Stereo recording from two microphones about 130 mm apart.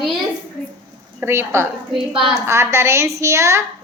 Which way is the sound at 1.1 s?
20° right (ahead or behind).